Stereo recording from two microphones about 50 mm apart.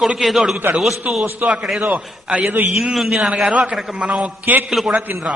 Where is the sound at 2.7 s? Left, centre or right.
Centre.